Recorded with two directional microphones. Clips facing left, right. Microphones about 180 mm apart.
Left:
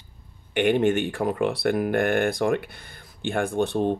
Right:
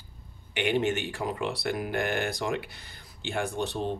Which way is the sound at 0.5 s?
50° left (ahead or behind).